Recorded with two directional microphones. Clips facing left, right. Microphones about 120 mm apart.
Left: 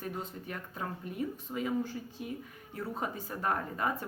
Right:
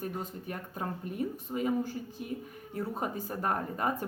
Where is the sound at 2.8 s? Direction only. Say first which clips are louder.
Right 2 dB; 45° right (ahead or behind).